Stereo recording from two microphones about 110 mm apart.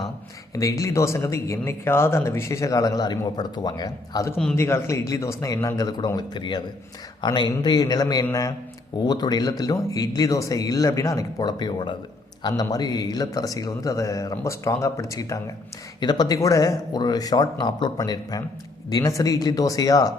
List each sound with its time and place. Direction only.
0.5 s speech: 30° left (ahead or behind)
4.5 s speech: 25° left (ahead or behind)